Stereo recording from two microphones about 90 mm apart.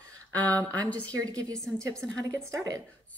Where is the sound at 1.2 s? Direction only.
40° right (ahead or behind).